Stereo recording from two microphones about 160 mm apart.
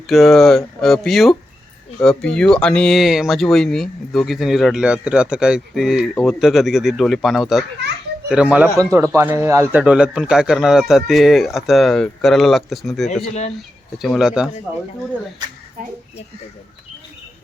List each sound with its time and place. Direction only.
0.1 s speech: centre (ahead or behind)
8.8 s speech: 20° right (ahead or behind)
9.8 s speech: 5° right (ahead or behind)